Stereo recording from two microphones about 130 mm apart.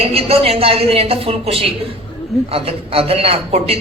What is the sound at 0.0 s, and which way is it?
A man's voice, 50° right (ahead or behind).